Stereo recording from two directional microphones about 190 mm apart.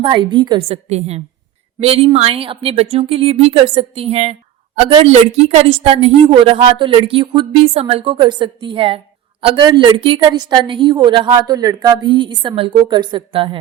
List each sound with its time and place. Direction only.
0.0 s a woman's voice: 25° right (ahead or behind)